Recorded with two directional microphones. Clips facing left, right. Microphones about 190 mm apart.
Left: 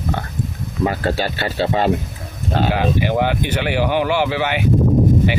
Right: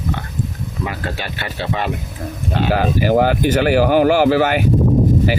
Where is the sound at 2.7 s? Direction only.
40° right (ahead or behind).